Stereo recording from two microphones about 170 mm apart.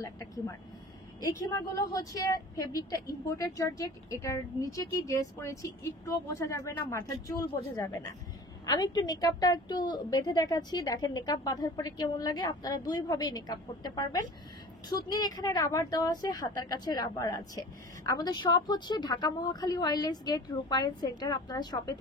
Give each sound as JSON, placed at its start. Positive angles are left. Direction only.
{"t": 0.0, "sound": "speech", "side_deg": 20}